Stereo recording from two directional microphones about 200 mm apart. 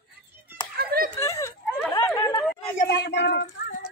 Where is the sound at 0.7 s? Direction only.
50° right (ahead or behind).